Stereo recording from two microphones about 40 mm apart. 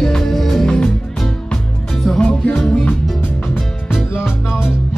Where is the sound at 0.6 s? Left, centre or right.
Left.